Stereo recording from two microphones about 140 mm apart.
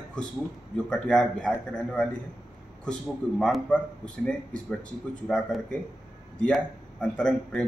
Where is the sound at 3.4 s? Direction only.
10° left (ahead or behind).